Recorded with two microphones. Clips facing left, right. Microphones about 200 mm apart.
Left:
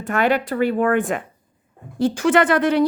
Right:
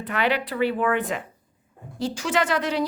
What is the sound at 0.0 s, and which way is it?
A woman's voice, 45° left (ahead or behind).